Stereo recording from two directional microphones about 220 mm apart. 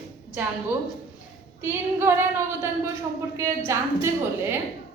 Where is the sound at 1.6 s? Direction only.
10° right (ahead or behind).